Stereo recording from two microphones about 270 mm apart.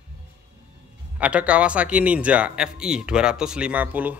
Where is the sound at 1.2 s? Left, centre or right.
Centre.